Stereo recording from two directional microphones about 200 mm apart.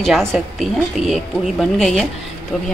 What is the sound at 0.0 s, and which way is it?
Speech, centre (ahead or behind).